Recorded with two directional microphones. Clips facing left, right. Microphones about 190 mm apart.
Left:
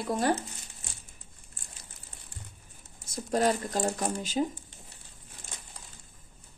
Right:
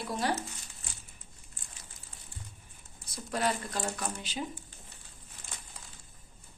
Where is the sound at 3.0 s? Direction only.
45° left (ahead or behind).